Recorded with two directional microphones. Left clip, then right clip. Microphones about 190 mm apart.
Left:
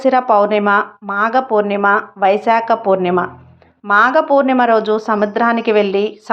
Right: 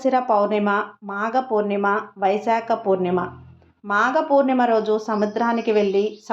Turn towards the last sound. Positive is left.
turn(degrees=20)  # may be behind; listen again after turning